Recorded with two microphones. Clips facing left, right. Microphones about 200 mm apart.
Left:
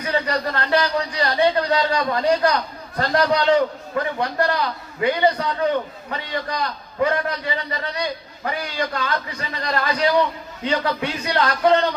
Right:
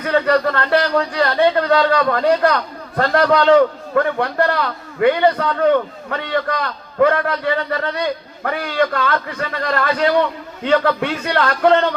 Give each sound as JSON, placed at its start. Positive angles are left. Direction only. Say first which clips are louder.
{"t": 0.0, "sound": "a man's voice", "louder": "right 7 dB", "side_deg": -55}